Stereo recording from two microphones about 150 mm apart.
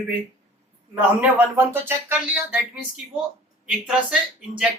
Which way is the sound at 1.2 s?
15° right (ahead or behind).